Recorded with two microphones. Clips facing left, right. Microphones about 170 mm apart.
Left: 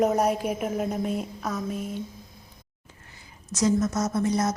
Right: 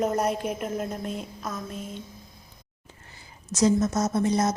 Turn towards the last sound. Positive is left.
turn(degrees=-25)  # may be behind; listen again after turning